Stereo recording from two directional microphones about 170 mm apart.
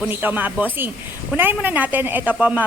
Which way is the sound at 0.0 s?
10° right (ahead or behind).